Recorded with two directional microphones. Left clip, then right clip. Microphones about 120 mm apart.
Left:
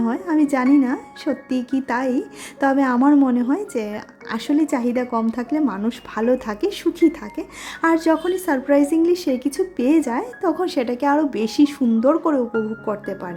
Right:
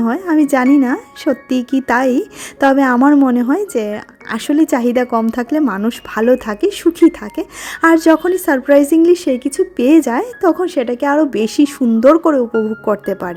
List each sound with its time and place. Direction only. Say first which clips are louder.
0.0 s speech: right 6 dB; 55° right (ahead or behind)
10.6 s a woman's voice: right 5 dB; 30° right (ahead or behind)
12.8 s speech: right 9 dB; 60° right (ahead or behind)